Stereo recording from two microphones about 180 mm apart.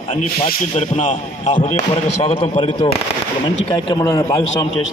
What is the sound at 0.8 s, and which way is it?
A man's voice, 40° left (ahead or behind).